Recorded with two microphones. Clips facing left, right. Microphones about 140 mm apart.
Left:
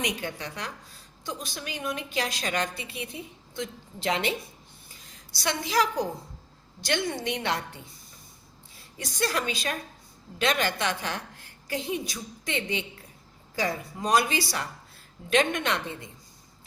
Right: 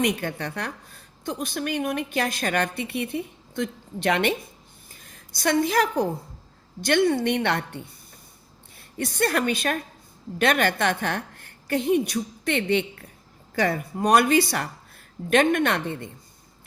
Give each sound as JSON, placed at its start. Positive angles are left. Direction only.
{"t": 0.0, "sound": "a woman's voice", "side_deg": -55}
{"t": 8.8, "sound": "a woman's voice", "side_deg": -60}